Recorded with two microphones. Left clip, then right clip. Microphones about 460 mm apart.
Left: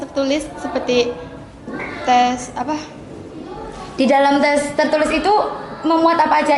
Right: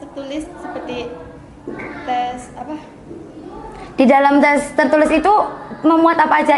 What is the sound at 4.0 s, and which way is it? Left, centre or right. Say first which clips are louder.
A woman's voice: right 2 dB; right.